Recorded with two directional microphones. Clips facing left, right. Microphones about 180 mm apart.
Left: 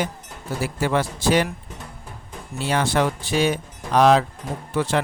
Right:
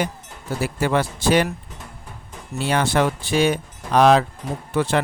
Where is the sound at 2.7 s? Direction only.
60° right (ahead or behind).